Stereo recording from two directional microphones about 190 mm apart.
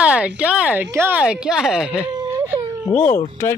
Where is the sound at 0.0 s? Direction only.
5° right (ahead or behind).